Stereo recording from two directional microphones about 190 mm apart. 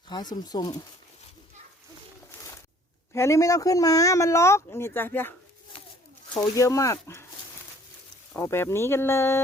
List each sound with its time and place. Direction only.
0.1 s speech: 20° left (ahead or behind)
3.1 s speech: 15° left (ahead or behind)
6.3 s speech: 15° left (ahead or behind)
8.3 s speech: 15° left (ahead or behind)